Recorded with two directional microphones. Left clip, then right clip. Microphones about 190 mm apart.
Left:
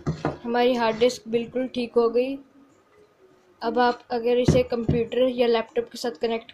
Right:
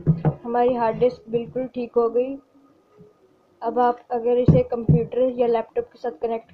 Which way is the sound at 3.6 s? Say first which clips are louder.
Right 2 dB; 15° left (ahead or behind).